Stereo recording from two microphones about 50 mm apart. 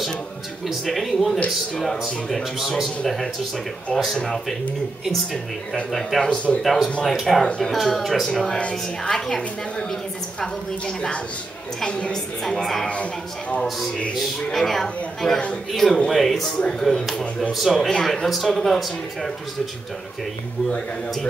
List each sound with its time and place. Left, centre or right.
0.8 s a man's voice: centre
3.9 s speech: centre
5.9 s speech: centre
6.2 s a woman's voice: left
6.6 s speech: centre
7.4 s a man's voice: centre
7.7 s speech: centre
8.5 s a woman's voice: left
9.1 s a man's voice: centre
11.8 s a woman's voice: centre
12.4 s a man's voice: centre
14.5 s a man's voice: centre
17.7 s a man's voice: centre
18.0 s speech: centre